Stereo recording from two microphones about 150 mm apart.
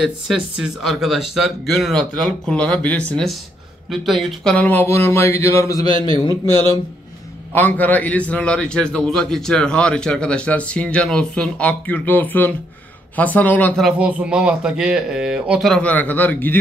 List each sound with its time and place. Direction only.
0.0 s speech: 5° right (ahead or behind)
4.6 s a man's voice: 10° left (ahead or behind)
7.5 s a man's voice: 10° left (ahead or behind)
13.8 s speech: 5° right (ahead or behind); by 16.5 s 10° left (ahead or behind)